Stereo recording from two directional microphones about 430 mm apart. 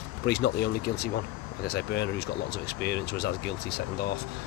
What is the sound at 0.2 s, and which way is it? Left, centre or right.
Speech, left.